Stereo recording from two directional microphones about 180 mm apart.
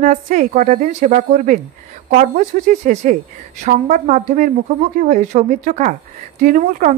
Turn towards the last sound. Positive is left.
turn(degrees=-45)  # may be behind; listen again after turning